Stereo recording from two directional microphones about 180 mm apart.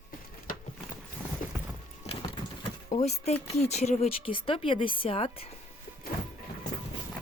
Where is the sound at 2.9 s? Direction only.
40° left (ahead or behind).